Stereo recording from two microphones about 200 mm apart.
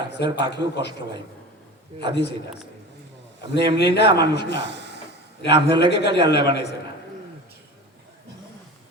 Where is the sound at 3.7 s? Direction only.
55° left (ahead or behind).